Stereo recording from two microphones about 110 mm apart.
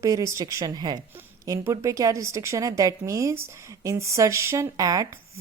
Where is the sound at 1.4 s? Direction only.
30° right (ahead or behind).